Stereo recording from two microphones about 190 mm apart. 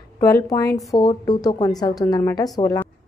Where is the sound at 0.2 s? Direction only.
15° left (ahead or behind).